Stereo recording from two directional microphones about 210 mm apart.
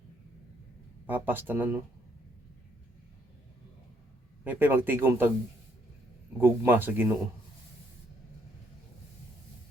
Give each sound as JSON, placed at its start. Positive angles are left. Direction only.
{"t": 1.0, "sound": "speech", "side_deg": -10}
{"t": 4.4, "sound": "speech", "side_deg": -10}
{"t": 6.4, "sound": "speech", "side_deg": -10}